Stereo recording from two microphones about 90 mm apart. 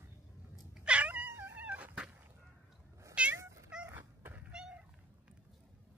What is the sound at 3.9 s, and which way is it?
Cat, 25° right (ahead or behind).